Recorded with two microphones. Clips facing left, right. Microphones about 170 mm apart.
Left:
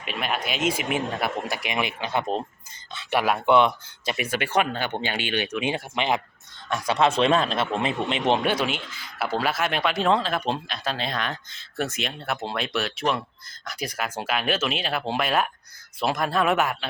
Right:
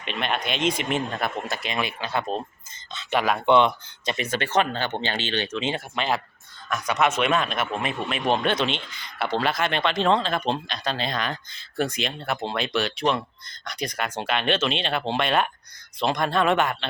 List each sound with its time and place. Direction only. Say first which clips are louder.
0.0 s speech: right 1 dB; 5° left (ahead or behind)
6.7 s speech: left 1 dB; 30° left (ahead or behind)
8.4 s speech: even; 10° left (ahead or behind)